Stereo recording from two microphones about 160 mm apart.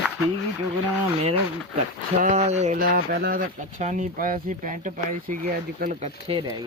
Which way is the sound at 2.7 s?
65° right (ahead or behind).